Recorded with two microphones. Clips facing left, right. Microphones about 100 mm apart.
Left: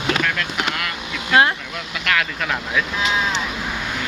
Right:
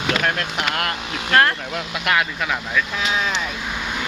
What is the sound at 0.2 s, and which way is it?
Speech, 40° right (ahead or behind).